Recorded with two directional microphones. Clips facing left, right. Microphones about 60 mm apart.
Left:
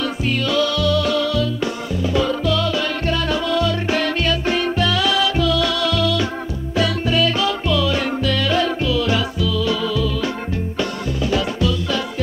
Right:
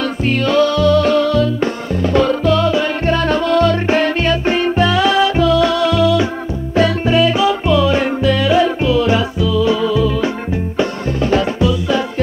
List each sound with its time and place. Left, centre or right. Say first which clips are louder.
0.0 s music: right 5 dB; right
2.1 s music: right 6 dB; right
2.5 s music: right 6 dB; right
3.2 s music: right 7 dB; right